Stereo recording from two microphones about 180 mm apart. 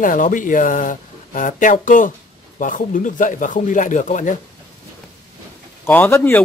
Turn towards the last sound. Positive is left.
turn(degrees=10)  # may be behind; listen again after turning